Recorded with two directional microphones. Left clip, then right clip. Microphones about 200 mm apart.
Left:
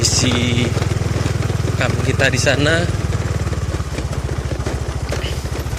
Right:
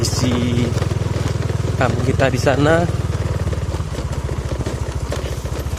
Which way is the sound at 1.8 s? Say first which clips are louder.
Even; 20° right (ahead or behind).